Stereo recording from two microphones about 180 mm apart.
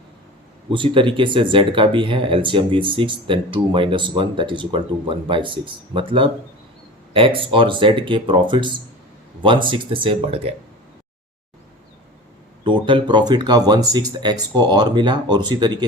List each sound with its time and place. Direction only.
0.7 s speech: 30° right (ahead or behind)
12.6 s speech: 25° right (ahead or behind)